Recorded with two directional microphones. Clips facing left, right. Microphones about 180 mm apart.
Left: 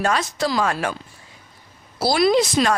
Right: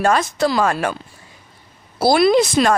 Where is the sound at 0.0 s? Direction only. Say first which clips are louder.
Right 5 dB; 50° right (ahead or behind).